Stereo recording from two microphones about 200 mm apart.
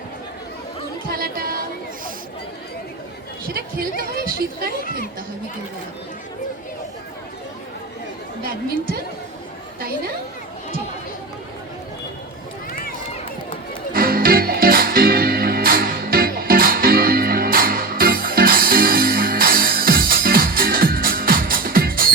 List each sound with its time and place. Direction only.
1.1 s music: 50° right (ahead or behind)
3.4 s a woman's voice: 45° right (ahead or behind)
8.4 s a woman's voice: 45° right (ahead or behind)
13.9 s music: 45° right (ahead or behind)